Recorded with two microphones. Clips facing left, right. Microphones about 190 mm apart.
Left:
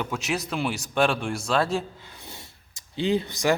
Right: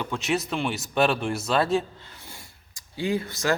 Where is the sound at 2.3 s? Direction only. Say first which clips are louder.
Left 2 dB; 20° left (ahead or behind).